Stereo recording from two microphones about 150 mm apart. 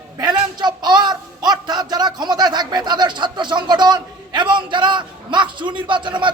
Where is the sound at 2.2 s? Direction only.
30° right (ahead or behind).